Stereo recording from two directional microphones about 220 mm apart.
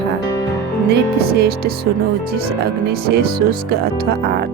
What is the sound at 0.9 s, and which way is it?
Speech, 45° right (ahead or behind).